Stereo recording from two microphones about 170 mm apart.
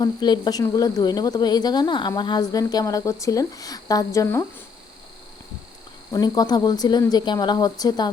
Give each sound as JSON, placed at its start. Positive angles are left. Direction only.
{"t": 0.0, "sound": "speech", "side_deg": 25}
{"t": 6.1, "sound": "speech", "side_deg": 25}